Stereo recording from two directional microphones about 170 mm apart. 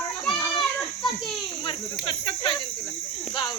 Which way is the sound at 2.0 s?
30° left (ahead or behind).